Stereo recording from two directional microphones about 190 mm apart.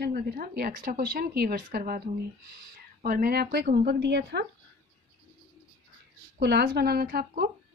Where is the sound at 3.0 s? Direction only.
50° right (ahead or behind).